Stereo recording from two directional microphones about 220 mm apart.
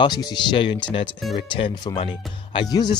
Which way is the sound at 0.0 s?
20° left (ahead or behind).